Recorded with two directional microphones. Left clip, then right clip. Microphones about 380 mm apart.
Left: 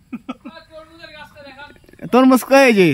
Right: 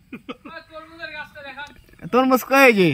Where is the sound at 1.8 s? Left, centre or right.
Centre.